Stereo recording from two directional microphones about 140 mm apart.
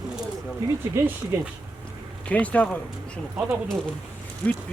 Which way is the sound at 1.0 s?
20° right (ahead or behind).